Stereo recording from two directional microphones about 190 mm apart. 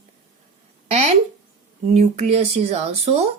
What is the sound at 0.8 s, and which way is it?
Speech, 35° right (ahead or behind).